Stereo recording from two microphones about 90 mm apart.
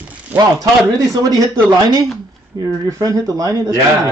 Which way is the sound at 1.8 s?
45° right (ahead or behind).